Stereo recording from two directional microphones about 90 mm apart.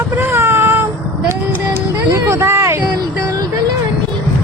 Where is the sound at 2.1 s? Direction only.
30° right (ahead or behind).